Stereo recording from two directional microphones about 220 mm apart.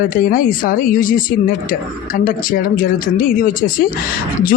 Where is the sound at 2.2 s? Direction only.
40° left (ahead or behind).